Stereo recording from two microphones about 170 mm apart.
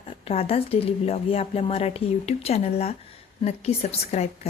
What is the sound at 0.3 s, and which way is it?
Speech, 35° left (ahead or behind).